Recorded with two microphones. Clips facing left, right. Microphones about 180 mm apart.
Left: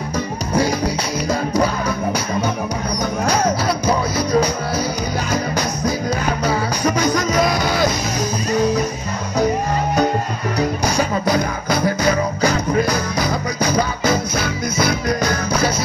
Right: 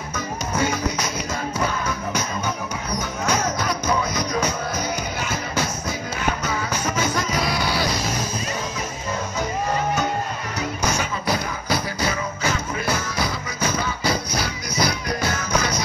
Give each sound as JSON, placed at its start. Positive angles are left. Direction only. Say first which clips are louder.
{"t": 0.6, "sound": "music", "louder": "left 5 dB", "side_deg": 35}
{"t": 3.3, "sound": "music", "louder": "left 4 dB", "side_deg": 35}
{"t": 6.4, "sound": "music", "louder": "left 7 dB", "side_deg": 35}
{"t": 10.6, "sound": "music", "louder": "left 6 dB", "side_deg": 40}
{"t": 14.3, "sound": "music", "louder": "left 5 dB", "side_deg": 50}